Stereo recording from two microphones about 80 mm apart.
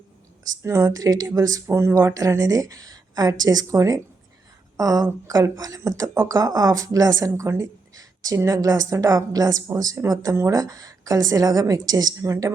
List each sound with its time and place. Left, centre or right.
0.6 s speech: right
0.9 s speech: right
1.6 s speech: right
7.4 s a sound: right
8.4 s speech: right
10.5 s speech: right
12.2 s speech: right